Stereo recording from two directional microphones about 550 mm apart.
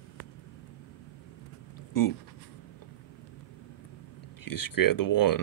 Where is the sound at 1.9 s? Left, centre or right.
Left.